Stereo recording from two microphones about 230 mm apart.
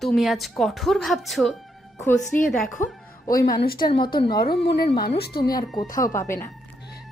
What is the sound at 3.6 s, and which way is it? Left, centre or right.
Speech, left.